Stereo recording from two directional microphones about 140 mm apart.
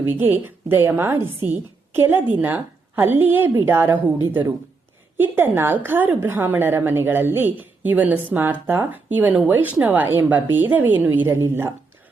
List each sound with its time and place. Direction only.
0.1 s a woman's voice: 15° right (ahead or behind)